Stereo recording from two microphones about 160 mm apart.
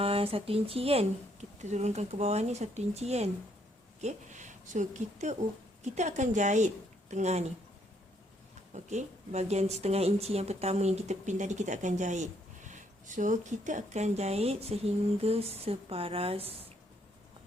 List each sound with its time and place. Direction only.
0.0 s speech: 35° right (ahead or behind)
8.7 s speech: 45° right (ahead or behind)